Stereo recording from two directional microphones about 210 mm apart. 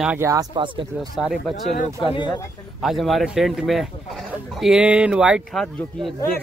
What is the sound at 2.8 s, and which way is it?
Speech, centre (ahead or behind).